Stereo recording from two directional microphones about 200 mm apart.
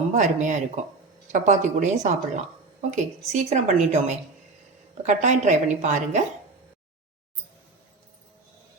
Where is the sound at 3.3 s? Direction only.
35° right (ahead or behind).